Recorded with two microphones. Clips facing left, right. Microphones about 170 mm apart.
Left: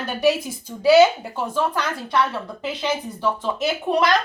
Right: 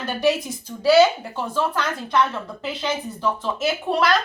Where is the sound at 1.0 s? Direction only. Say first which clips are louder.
Left 1 dB; 5° left (ahead or behind).